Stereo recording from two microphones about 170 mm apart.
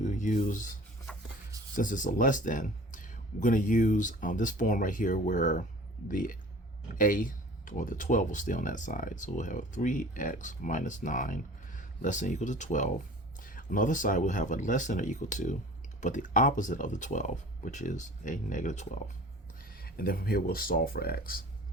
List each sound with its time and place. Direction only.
0.0 s speech: 45° left (ahead or behind)
19.7 s speech: 60° left (ahead or behind)